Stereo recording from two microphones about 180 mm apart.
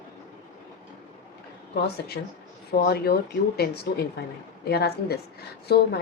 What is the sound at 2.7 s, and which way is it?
A woman's voice, 55° left (ahead or behind).